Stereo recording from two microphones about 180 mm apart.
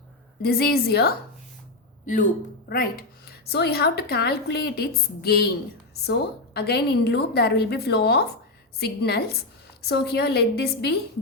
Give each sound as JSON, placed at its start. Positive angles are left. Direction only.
{"t": 0.4, "sound": "a woman's voice", "side_deg": 60}
{"t": 2.6, "sound": "a woman's voice", "side_deg": 55}